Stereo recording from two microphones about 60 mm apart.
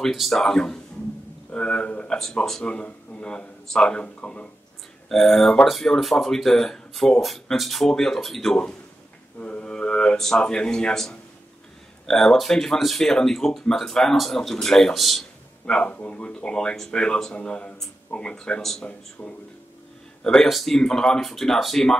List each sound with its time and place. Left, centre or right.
0.0 s speech: centre
1.5 s speech: centre
5.1 s speech: centre
15.6 s speech: centre
19.2 s speech: left
20.2 s speech: centre